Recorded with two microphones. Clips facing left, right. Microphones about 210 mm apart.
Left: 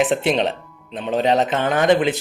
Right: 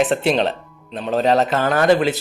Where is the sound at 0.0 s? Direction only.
Centre (ahead or behind).